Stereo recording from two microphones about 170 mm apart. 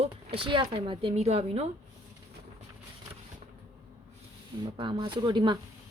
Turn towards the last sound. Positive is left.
turn(degrees=-25)  # may be behind; listen again after turning